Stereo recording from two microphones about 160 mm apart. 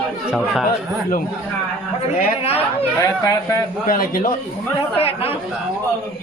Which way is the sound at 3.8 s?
60° left (ahead or behind).